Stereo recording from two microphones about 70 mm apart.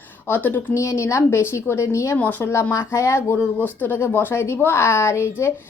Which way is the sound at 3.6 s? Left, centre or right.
Left.